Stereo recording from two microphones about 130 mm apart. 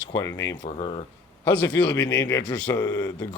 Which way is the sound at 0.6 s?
40° left (ahead or behind).